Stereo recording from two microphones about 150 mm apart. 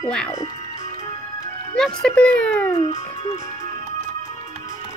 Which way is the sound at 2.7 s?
45° left (ahead or behind).